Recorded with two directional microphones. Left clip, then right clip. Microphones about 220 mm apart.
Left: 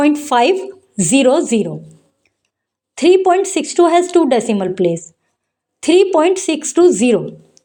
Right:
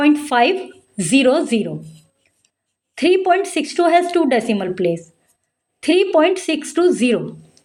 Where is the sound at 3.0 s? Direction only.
30° left (ahead or behind).